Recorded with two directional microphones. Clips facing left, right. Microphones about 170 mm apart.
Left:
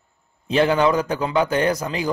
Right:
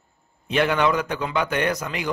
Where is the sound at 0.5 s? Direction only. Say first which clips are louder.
Left 3 dB; 30° left (ahead or behind).